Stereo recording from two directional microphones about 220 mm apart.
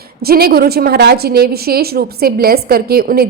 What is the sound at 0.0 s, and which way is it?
A woman's voice, 45° right (ahead or behind).